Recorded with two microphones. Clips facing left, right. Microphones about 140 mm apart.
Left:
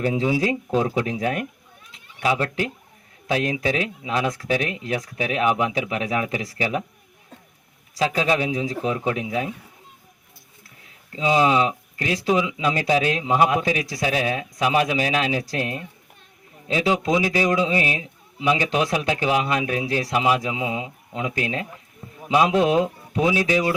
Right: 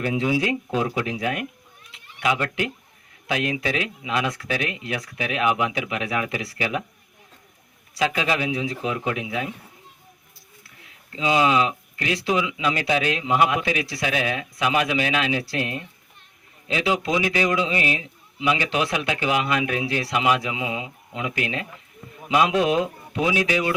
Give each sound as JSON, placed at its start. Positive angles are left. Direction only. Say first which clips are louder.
{"t": 0.0, "sound": "a man's voice", "louder": "left 1 dB", "side_deg": 30}
{"t": 1.9, "sound": "a sound", "louder": "left 1 dB", "side_deg": 40}
{"t": 3.2, "sound": "a man's voice", "louder": "left 2 dB", "side_deg": 35}
{"t": 7.9, "sound": "a man's voice", "louder": "left 2 dB", "side_deg": 35}
{"t": 11.1, "sound": "a man's voice", "louder": "left 1 dB", "side_deg": 35}